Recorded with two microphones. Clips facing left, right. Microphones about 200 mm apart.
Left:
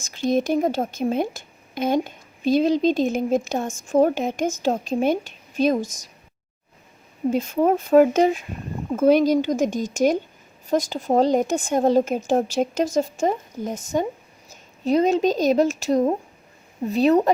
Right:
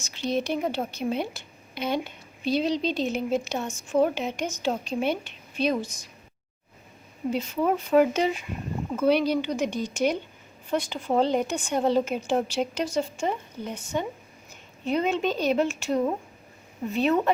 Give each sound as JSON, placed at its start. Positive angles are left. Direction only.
{"t": 0.1, "sound": "a woman's voice", "side_deg": 45}
{"t": 7.3, "sound": "a woman's voice", "side_deg": 50}